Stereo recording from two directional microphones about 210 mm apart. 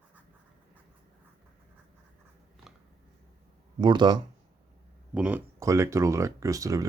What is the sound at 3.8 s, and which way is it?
Speech, 20° right (ahead or behind).